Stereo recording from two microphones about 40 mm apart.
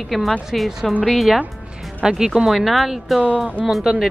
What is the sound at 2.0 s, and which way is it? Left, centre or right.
Speech, centre.